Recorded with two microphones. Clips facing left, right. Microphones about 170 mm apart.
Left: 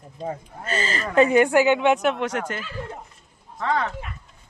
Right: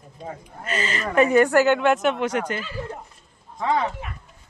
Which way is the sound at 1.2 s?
20° left (ahead or behind).